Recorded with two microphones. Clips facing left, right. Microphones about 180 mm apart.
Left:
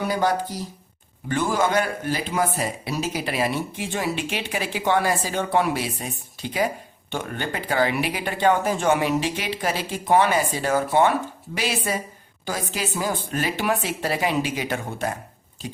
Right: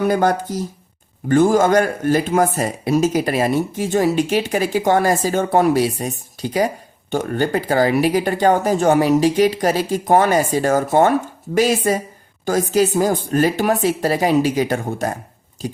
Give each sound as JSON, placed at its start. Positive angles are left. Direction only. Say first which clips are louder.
{"t": 0.0, "sound": "speech", "louder": "right 6 dB", "side_deg": -50}